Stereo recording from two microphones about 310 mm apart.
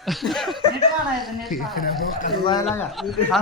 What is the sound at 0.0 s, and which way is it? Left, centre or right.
Speech, centre.